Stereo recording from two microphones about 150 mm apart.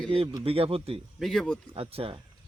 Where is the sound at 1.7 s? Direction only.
40° right (ahead or behind).